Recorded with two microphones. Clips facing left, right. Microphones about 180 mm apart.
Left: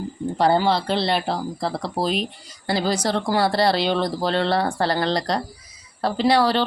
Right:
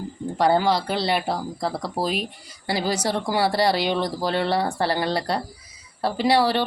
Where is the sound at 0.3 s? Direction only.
10° right (ahead or behind).